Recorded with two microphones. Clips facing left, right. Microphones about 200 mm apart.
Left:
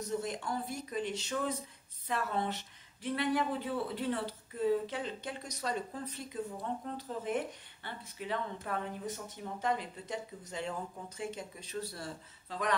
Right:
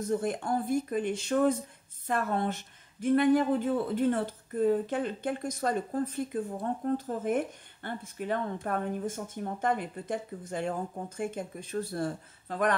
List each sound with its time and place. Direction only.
0.0 s speech: 55° right (ahead or behind)